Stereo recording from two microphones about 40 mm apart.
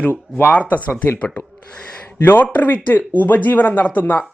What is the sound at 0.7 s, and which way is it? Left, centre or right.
Speech, left.